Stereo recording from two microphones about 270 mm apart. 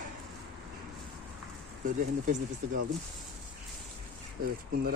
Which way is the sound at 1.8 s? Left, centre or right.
Right.